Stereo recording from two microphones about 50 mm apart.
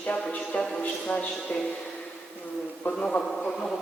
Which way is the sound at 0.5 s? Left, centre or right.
Left.